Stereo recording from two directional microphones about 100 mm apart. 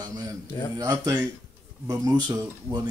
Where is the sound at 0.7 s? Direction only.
35° right (ahead or behind).